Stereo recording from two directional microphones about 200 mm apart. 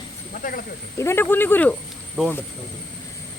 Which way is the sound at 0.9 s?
10° left (ahead or behind).